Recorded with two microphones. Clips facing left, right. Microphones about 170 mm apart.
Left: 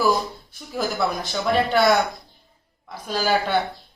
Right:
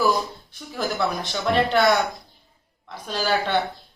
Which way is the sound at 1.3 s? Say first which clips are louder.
Even; 5° left (ahead or behind).